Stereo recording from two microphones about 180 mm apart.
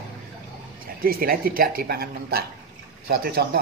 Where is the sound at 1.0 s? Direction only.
55° right (ahead or behind).